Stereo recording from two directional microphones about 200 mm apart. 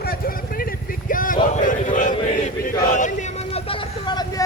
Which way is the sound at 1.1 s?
45° left (ahead or behind).